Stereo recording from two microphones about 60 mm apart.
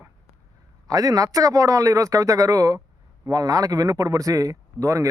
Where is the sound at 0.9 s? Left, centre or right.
Right.